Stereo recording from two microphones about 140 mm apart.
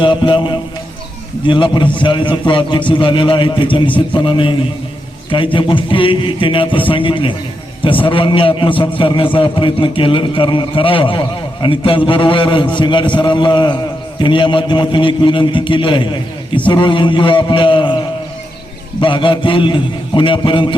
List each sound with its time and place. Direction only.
0.0 s a man's voice: 35° left (ahead or behind)
18.9 s a man's voice: 35° left (ahead or behind)